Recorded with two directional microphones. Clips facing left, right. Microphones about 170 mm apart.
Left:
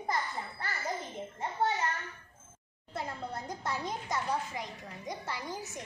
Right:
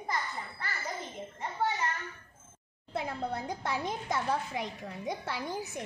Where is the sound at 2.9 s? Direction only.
60° right (ahead or behind).